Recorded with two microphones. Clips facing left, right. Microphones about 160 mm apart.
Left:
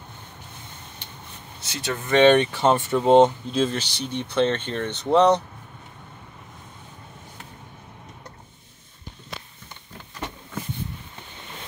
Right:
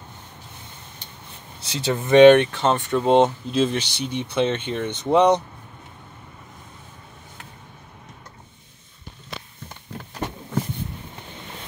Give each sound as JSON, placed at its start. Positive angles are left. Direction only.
{"t": 1.6, "sound": "speech", "side_deg": -30}
{"t": 2.0, "sound": "speech", "side_deg": -15}
{"t": 2.3, "sound": "speech", "side_deg": 5}